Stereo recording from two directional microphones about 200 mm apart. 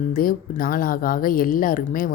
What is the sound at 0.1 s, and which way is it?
Speech, 45° left (ahead or behind).